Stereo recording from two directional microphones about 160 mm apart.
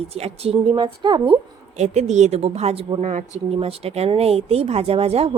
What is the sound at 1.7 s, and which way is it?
A woman's voice, 45° right (ahead or behind).